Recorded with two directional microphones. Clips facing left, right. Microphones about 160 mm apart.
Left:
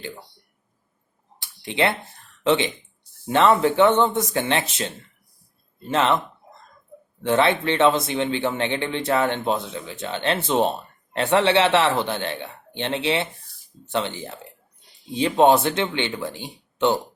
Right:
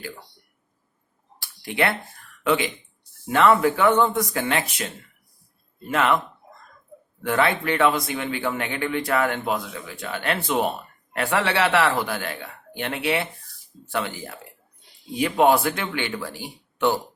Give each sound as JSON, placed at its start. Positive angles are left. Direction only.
{"t": 1.4, "sound": "a sound", "side_deg": 20}
{"t": 3.2, "sound": "speech", "side_deg": 25}
{"t": 5.9, "sound": "speech", "side_deg": 25}